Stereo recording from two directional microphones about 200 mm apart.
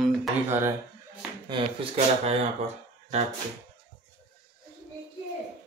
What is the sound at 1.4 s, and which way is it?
Speech, 25° right (ahead or behind).